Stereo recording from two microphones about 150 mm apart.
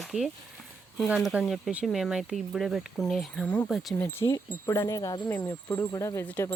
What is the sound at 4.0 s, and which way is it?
Speech, 15° left (ahead or behind).